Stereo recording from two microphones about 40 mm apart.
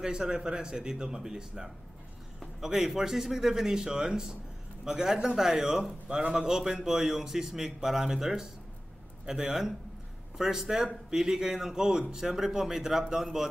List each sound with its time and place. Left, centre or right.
0.0 s a man's voice: centre